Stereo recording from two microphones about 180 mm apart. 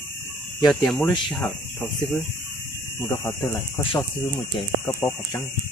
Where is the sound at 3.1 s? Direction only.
15° left (ahead or behind).